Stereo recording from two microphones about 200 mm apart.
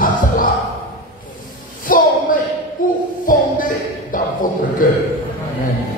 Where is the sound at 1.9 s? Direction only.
45° left (ahead or behind).